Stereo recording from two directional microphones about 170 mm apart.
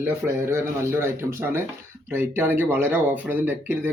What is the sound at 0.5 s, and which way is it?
Speech, 15° right (ahead or behind).